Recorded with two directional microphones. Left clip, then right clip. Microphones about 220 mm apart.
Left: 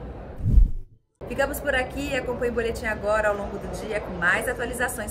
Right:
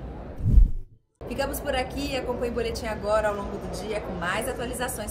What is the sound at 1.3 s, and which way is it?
A woman's voice, 15° left (ahead or behind).